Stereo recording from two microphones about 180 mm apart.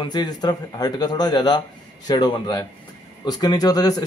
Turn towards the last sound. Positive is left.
turn(degrees=20)  # may be behind; listen again after turning